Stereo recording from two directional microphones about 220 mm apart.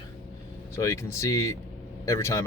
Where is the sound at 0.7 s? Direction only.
15° left (ahead or behind).